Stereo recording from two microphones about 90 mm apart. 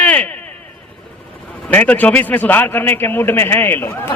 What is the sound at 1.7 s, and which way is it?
A man's voice, 20° left (ahead or behind).